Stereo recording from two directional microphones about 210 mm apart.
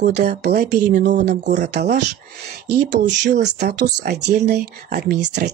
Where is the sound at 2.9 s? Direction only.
55° right (ahead or behind).